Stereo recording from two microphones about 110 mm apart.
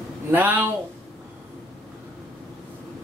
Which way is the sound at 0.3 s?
15° right (ahead or behind).